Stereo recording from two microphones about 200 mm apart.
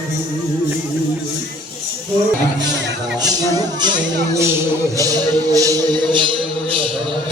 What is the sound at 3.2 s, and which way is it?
Music, 20° right (ahead or behind).